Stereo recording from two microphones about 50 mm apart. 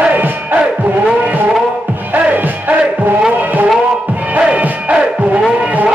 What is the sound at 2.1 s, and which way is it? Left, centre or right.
Music, right.